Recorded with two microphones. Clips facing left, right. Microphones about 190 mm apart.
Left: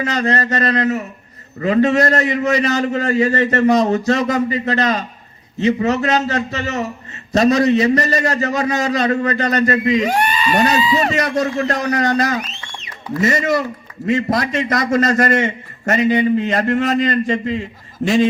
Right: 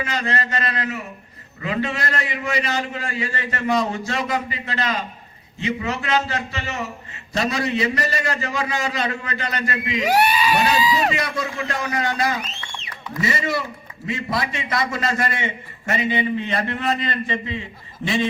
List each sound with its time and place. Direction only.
0.0 s a man's voice: 40° left (ahead or behind)
10.0 s speech: 5° right (ahead or behind)
11.1 s a man's voice: 45° left (ahead or behind)